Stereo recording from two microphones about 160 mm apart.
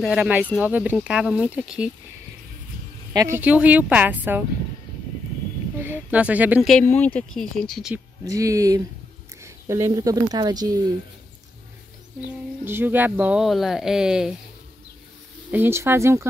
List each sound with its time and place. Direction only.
0.0 s speech: 5° right (ahead or behind)
3.1 s speech: 20° right (ahead or behind)
5.8 s speech: 10° right (ahead or behind)
7.2 s speech: 5° left (ahead or behind)
8.3 s speech: 20° right (ahead or behind)
12.6 s speech: 10° right (ahead or behind)
15.5 s speech: 15° right (ahead or behind)